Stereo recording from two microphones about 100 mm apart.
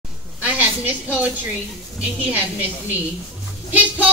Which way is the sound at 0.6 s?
15° right (ahead or behind).